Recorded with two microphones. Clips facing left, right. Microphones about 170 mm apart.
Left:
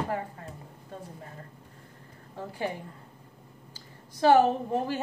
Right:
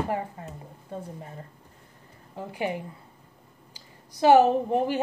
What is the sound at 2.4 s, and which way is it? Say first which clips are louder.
A woman's voice: right 3 dB; 15° right (ahead or behind).